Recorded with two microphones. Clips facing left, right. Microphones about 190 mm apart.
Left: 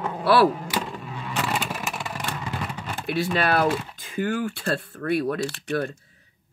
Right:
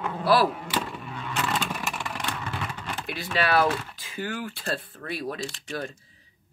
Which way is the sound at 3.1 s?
50° left (ahead or behind).